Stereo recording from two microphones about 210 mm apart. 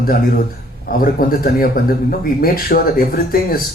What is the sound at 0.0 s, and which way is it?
Speech, 45° left (ahead or behind).